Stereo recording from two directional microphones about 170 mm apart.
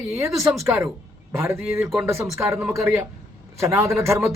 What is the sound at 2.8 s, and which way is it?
A man's voice, 15° right (ahead or behind).